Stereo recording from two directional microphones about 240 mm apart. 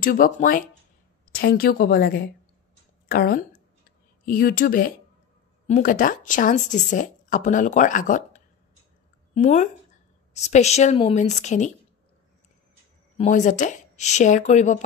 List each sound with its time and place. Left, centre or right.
0.0 s a woman's voice: left
13.2 s speech: left